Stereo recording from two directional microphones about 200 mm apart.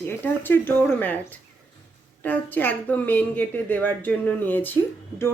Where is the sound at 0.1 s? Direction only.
10° left (ahead or behind).